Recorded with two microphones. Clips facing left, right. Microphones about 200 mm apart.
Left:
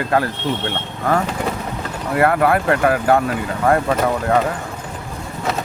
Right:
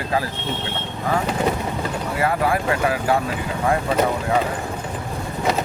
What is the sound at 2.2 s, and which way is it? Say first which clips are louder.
Speech: left 6 dB; 60° left (ahead or behind).